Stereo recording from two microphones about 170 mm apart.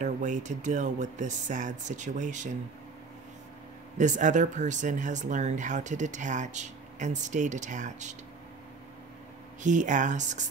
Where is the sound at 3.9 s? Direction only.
45° right (ahead or behind).